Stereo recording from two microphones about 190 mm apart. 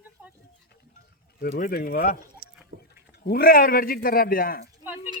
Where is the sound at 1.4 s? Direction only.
50° left (ahead or behind).